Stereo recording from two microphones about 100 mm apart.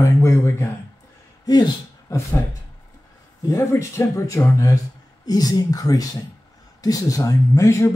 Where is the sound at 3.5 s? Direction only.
30° left (ahead or behind).